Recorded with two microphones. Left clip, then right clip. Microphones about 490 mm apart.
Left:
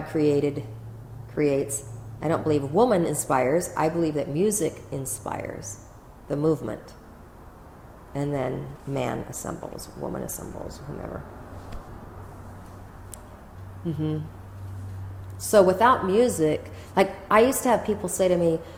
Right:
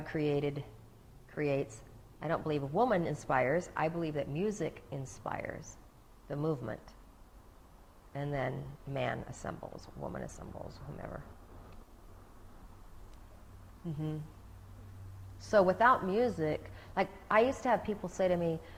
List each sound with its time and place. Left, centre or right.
0.1 s a woman's voice: right
8.1 s a woman's voice: right
15.4 s a woman's voice: right